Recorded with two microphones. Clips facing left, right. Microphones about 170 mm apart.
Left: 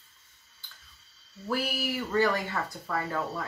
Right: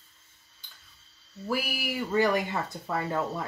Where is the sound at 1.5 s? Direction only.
10° right (ahead or behind).